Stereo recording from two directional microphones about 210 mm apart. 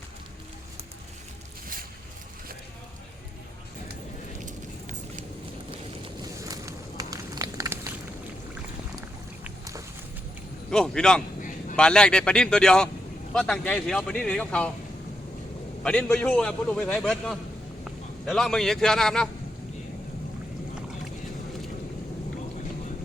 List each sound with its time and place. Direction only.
4.4 s vehicle: 35° right (ahead or behind)
6.4 s a sound: 15° right (ahead or behind)
9.4 s boat: 15° right (ahead or behind)
10.7 s a man's voice: 5° left (ahead or behind)
15.8 s a man's voice: 5° left (ahead or behind)